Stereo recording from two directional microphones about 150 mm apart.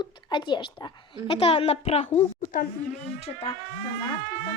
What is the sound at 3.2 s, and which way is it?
Speech, 40° left (ahead or behind).